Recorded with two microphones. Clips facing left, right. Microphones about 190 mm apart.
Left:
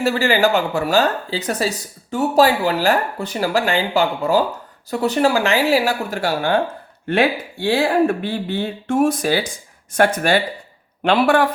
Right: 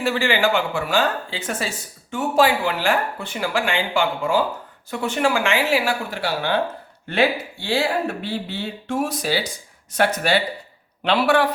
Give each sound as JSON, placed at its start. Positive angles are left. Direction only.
{"t": 0.0, "sound": "speech", "side_deg": 40}